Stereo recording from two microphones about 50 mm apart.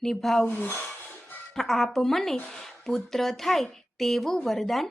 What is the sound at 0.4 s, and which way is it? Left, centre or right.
Speech, left.